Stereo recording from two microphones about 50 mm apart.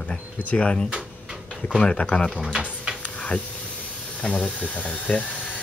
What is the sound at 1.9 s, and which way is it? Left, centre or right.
Speech, left.